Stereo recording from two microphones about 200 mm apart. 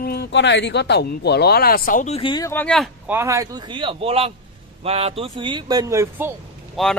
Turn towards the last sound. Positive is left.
turn(degrees=0)  # may be behind; listen again after turning